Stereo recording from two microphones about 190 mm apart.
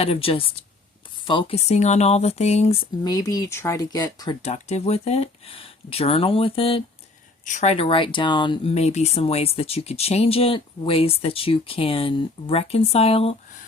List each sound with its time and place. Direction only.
0.0 s speech: 30° left (ahead or behind)
3.0 s speech: 20° left (ahead or behind)
4.4 s speech: 35° left (ahead or behind)